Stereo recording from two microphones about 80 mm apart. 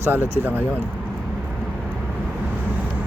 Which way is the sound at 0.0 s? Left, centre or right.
Right.